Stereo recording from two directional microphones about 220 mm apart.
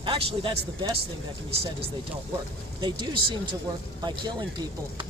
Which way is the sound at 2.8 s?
20° right (ahead or behind).